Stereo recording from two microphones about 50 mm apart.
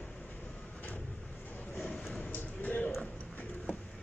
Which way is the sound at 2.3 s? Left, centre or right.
Left.